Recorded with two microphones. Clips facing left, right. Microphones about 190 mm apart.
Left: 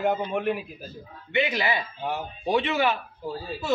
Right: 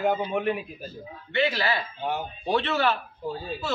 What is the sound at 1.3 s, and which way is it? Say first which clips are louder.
Speech: even; 15° left (ahead or behind).